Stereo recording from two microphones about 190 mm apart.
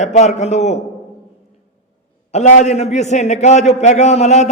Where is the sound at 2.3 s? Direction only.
40° left (ahead or behind).